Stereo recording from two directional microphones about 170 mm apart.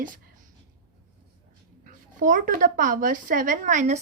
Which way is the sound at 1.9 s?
50° right (ahead or behind).